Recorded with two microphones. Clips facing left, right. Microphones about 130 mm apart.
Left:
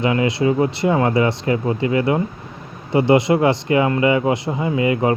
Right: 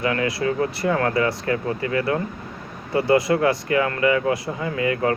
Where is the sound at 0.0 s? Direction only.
20° left (ahead or behind).